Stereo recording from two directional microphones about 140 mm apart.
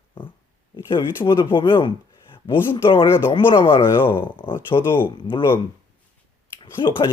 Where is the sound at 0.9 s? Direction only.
35° left (ahead or behind).